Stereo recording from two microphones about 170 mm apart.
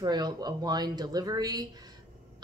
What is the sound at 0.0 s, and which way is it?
A woman's voice, 25° right (ahead or behind).